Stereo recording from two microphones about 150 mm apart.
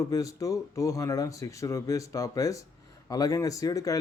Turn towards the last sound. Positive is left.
turn(degrees=25)  # may be behind; listen again after turning